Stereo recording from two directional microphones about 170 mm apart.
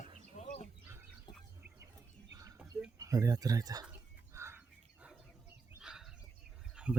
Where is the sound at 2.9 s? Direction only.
20° right (ahead or behind).